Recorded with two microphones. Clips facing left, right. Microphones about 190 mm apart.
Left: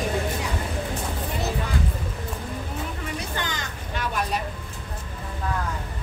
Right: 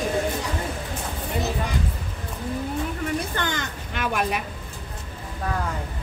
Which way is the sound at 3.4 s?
55° right (ahead or behind).